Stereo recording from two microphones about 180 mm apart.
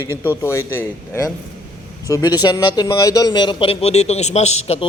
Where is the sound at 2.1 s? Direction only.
20° left (ahead or behind).